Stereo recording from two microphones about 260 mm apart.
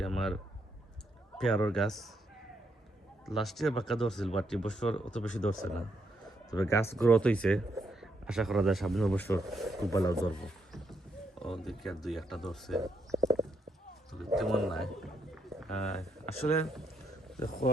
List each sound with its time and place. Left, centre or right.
0.0 s speech: centre
1.4 s speech: centre
3.2 s speech: centre
5.1 s speech: left
5.5 s speech: centre
6.5 s speech: centre
9.9 s speech: centre
10.3 s a sound: centre
11.4 s speech: centre
12.8 s stomach rumble: centre
14.1 s a sound: centre
15.7 s speech: left